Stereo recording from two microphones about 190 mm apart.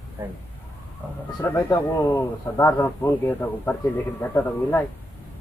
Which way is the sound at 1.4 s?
10° left (ahead or behind).